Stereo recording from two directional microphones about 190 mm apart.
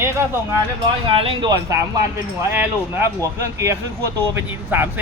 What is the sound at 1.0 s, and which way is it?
Speech, 30° right (ahead or behind).